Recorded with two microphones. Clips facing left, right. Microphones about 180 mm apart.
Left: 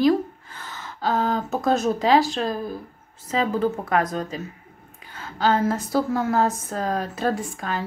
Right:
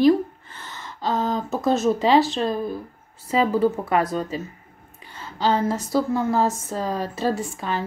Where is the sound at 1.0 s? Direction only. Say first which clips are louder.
Left 1 dB; centre (ahead or behind).